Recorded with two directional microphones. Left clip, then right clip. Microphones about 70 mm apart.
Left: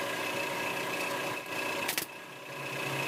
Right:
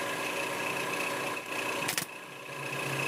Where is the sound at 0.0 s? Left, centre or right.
Left.